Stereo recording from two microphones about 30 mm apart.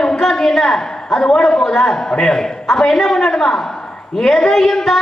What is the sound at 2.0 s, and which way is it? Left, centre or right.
A man's voice, left.